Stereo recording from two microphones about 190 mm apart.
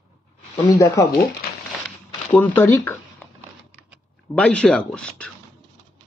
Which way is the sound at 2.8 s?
10° left (ahead or behind).